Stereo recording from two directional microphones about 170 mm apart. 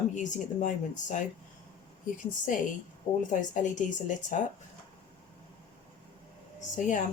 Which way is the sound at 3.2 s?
50° left (ahead or behind).